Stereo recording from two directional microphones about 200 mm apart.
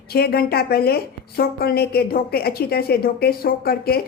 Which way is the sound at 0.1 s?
50° left (ahead or behind).